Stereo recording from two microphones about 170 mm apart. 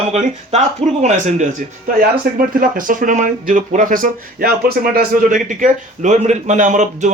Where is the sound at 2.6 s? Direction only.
50° right (ahead or behind).